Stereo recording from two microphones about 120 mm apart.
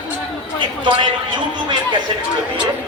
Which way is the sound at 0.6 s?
40° right (ahead or behind).